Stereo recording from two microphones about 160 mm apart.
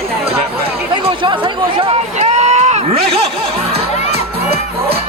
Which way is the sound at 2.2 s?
45° right (ahead or behind).